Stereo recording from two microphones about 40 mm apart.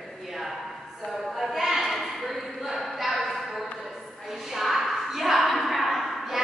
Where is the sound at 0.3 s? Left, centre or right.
Centre.